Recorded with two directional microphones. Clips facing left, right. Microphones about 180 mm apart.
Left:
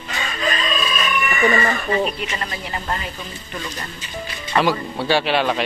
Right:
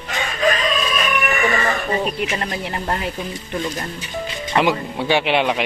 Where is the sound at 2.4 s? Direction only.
60° right (ahead or behind).